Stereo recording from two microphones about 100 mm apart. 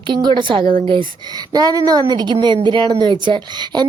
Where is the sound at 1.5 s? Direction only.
40° right (ahead or behind).